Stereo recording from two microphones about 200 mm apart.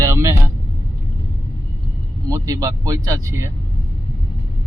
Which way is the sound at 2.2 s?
15° right (ahead or behind).